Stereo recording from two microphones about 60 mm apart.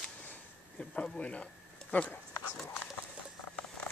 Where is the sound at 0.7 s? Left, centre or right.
Left.